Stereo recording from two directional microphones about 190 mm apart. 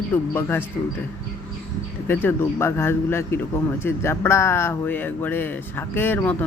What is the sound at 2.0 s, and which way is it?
Speech, 10° left (ahead or behind).